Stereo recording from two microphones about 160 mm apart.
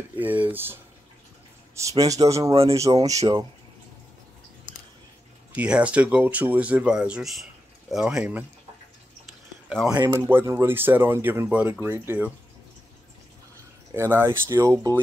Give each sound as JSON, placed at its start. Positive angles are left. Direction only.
{"t": 0.2, "sound": "speech", "side_deg": -10}
{"t": 1.8, "sound": "speech", "side_deg": -20}
{"t": 5.5, "sound": "speech", "side_deg": -5}
{"t": 9.7, "sound": "speech", "side_deg": -5}
{"t": 9.9, "sound": "speech", "side_deg": -20}
{"t": 13.9, "sound": "speech", "side_deg": -15}